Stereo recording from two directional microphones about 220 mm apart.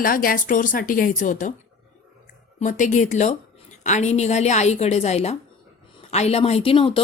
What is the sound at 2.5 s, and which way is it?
A woman's voice, 35° left (ahead or behind).